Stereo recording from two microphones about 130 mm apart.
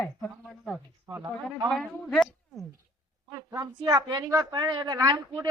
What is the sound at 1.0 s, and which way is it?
Speech, 30° right (ahead or behind).